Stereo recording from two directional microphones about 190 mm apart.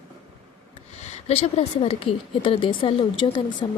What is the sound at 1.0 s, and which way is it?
Speech, 35° left (ahead or behind).